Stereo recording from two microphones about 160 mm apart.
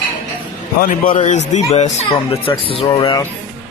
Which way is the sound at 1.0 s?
55° left (ahead or behind).